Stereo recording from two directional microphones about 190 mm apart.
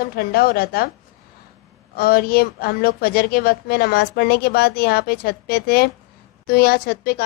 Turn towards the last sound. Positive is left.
turn(degrees=55)  # may be behind; listen again after turning